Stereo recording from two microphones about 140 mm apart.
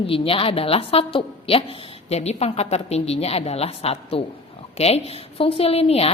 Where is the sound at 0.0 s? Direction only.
40° left (ahead or behind).